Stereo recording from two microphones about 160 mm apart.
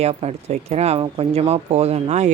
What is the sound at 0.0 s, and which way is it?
Speech, 40° right (ahead or behind).